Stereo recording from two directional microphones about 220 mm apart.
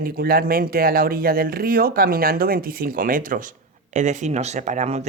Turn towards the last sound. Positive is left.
turn(degrees=-30)  # may be behind; listen again after turning